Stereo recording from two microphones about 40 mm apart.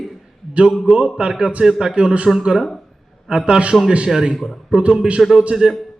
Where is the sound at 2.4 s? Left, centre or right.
Centre.